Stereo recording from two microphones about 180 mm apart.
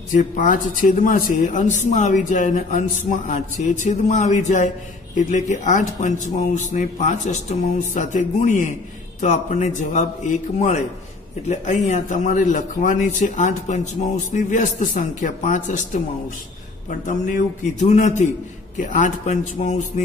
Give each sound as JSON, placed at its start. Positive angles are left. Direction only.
{"t": 0.1, "sound": "a man's voice", "side_deg": 45}
{"t": 17.7, "sound": "a man's voice", "side_deg": 40}